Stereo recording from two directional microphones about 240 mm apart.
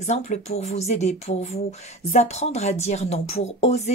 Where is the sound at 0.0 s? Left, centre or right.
Left.